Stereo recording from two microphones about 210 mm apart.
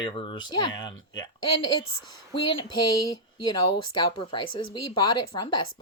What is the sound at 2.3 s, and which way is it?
Speech, 25° left (ahead or behind).